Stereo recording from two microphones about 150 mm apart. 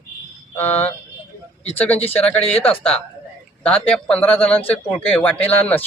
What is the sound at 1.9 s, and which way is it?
Speech, 40° left (ahead or behind).